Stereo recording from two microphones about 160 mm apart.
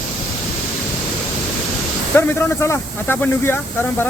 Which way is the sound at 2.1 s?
10° left (ahead or behind).